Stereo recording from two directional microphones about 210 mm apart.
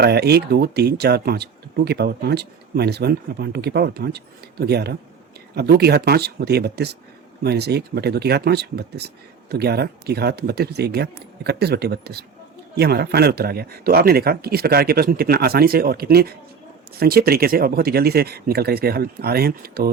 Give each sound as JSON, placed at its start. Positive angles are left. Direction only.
{"t": 0.0, "sound": "speech", "side_deg": -50}